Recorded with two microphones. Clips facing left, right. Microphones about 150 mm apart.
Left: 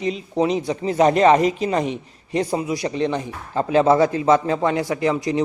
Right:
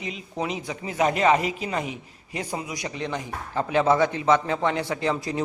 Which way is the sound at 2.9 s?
20° left (ahead or behind).